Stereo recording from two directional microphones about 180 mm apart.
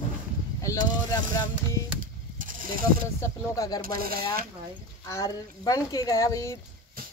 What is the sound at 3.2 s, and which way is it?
Speech, 20° left (ahead or behind).